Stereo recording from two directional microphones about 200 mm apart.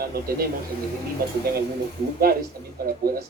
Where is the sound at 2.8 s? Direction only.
50° right (ahead or behind).